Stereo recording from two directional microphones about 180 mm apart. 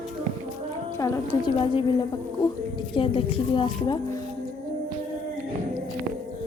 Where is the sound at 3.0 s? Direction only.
30° left (ahead or behind).